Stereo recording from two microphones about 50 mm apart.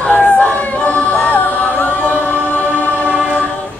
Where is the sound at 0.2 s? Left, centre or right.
Left.